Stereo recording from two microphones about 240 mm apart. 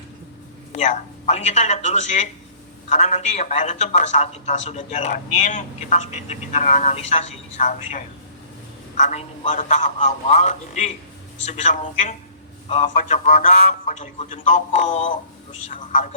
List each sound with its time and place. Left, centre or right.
0.7 s a man's voice: left